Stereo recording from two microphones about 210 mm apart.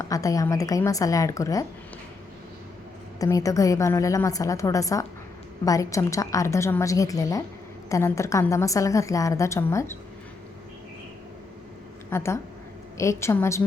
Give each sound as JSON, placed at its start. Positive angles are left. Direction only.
{"t": 0.0, "sound": "a woman's voice", "side_deg": 15}
{"t": 3.2, "sound": "a woman's voice", "side_deg": 15}
{"t": 12.1, "sound": "a woman's voice", "side_deg": 10}